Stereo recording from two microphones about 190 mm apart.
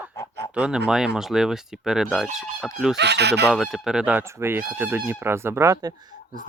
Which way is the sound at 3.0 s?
60° right (ahead or behind).